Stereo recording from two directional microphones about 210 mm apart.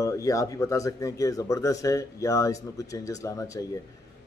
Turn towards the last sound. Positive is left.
turn(degrees=15)  # may be behind; listen again after turning